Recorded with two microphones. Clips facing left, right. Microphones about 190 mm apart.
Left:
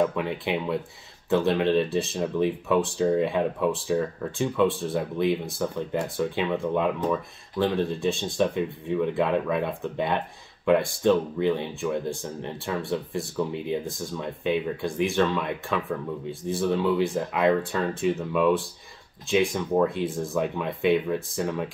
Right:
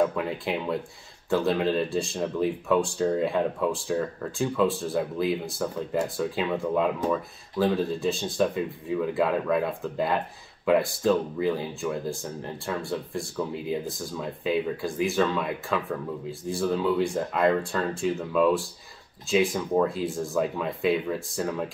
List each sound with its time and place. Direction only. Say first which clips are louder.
0.0 s speech: even; centre (ahead or behind)